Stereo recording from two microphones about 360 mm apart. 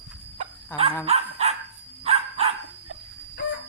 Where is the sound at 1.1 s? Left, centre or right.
Centre.